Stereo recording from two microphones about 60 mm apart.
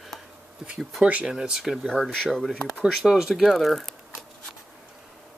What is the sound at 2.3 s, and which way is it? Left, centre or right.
Speech, centre.